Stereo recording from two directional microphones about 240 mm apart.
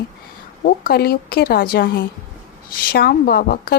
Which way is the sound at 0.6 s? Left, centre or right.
Left.